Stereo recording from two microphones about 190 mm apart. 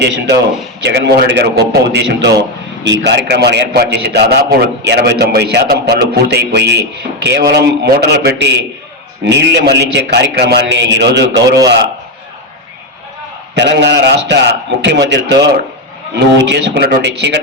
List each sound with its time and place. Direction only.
0.0 s a man's voice: 60° right (ahead or behind)
13.6 s a man's voice: 65° right (ahead or behind)